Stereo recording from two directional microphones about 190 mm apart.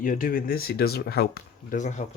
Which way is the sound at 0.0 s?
45° left (ahead or behind).